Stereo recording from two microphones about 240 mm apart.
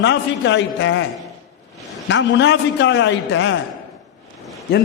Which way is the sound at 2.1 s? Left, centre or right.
Left.